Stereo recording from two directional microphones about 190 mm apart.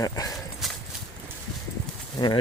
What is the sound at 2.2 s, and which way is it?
Speech, 20° left (ahead or behind).